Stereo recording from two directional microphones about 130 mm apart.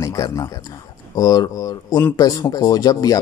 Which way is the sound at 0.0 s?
25° left (ahead or behind).